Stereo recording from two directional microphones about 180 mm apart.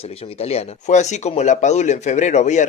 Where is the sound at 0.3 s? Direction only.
35° left (ahead or behind).